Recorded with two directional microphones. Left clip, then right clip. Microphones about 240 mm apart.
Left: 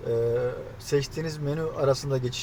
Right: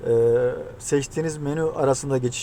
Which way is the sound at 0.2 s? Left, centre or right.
Right.